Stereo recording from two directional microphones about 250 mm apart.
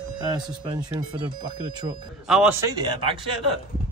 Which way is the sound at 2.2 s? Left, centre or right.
Centre.